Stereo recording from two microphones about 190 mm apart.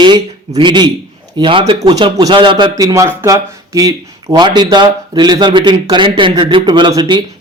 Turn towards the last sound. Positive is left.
turn(degrees=-20)  # may be behind; listen again after turning